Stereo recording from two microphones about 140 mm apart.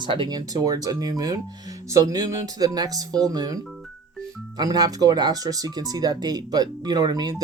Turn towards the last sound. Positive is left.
turn(degrees=-30)  # may be behind; listen again after turning